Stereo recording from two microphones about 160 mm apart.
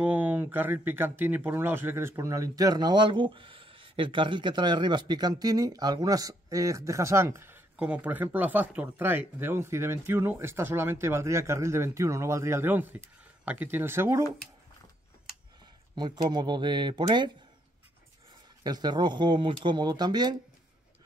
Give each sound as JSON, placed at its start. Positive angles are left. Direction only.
{"t": 0.0, "sound": "speech", "side_deg": -10}
{"t": 15.9, "sound": "speech", "side_deg": -25}
{"t": 18.6, "sound": "speech", "side_deg": -25}